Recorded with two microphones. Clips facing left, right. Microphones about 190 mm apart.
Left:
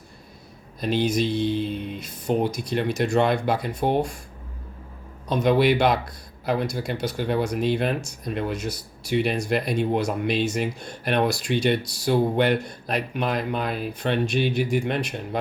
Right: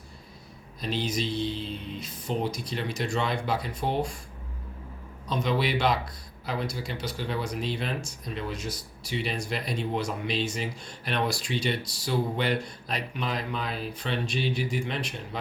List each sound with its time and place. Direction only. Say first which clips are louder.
0.8 s speech: left 7 dB; 60° left (ahead or behind)
5.3 s speech: left 8 dB; 55° left (ahead or behind)